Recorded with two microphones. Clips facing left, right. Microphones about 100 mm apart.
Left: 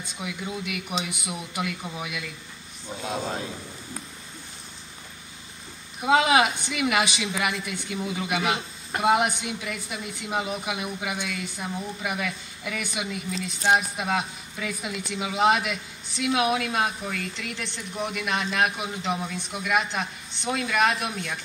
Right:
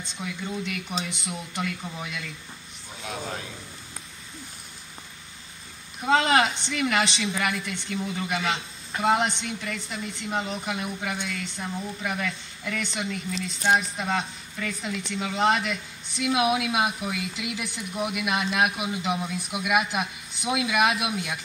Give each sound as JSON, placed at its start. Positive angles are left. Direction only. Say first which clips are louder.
{"t": 0.0, "sound": "a woman's voice", "louder": "even", "side_deg": 5}
{"t": 3.0, "sound": "speech", "louder": "left 4 dB", "side_deg": 25}
{"t": 5.9, "sound": "a woman's voice", "louder": "left 1 dB", "side_deg": 10}